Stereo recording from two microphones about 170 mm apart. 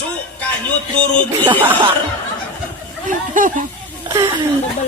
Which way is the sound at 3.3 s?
50° right (ahead or behind).